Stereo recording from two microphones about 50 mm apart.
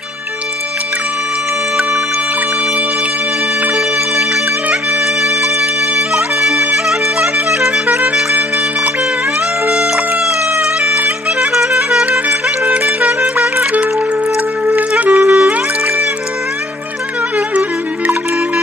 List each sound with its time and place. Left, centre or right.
6.1 s music: centre
9.6 s music: centre
13.4 s music: right
17.3 s music: right